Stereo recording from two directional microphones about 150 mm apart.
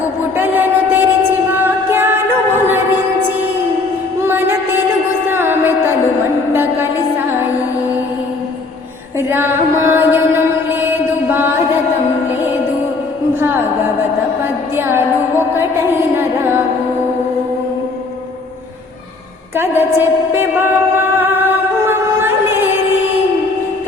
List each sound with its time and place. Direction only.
0.3 s music: 15° right (ahead or behind)
4.3 s music: 15° right (ahead or behind)
6.5 s a sound: 15° right (ahead or behind)
9.3 s mantra: 15° right (ahead or behind)
14.8 s music: 15° right (ahead or behind)
19.5 s a sound: 15° right (ahead or behind)